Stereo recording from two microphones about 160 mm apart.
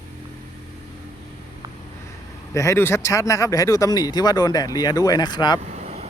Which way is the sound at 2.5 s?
20° left (ahead or behind).